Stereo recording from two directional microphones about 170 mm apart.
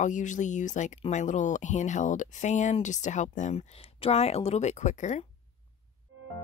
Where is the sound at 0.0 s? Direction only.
45° left (ahead or behind).